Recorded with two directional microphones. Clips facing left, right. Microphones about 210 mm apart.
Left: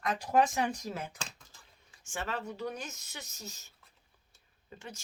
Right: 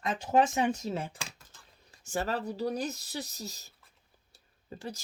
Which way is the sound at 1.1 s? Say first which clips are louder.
Even; centre (ahead or behind).